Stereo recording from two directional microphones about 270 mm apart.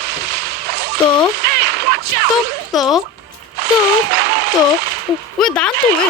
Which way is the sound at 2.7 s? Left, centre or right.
Centre.